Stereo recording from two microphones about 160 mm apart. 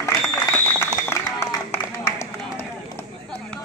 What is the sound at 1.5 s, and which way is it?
Run, 20° left (ahead or behind).